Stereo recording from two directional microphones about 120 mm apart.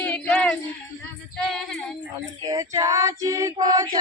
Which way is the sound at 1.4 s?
5° left (ahead or behind).